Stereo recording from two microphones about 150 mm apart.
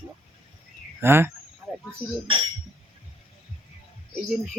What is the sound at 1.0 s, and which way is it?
Speech, 15° right (ahead or behind).